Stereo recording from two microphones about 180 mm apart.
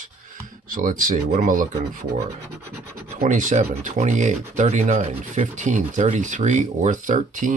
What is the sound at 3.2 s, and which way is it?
Speech, 45° right (ahead or behind).